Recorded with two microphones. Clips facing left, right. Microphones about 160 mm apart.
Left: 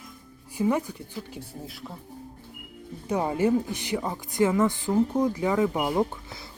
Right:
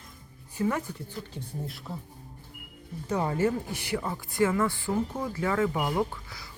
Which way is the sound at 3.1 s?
15° left (ahead or behind).